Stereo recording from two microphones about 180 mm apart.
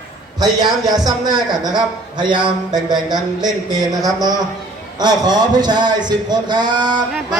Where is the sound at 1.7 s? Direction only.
25° right (ahead or behind).